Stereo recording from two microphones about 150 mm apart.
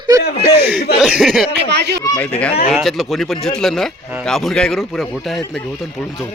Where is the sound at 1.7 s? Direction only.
90° right.